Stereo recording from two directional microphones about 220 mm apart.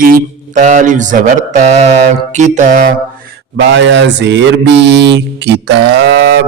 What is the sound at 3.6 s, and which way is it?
Mantra, 55° right (ahead or behind).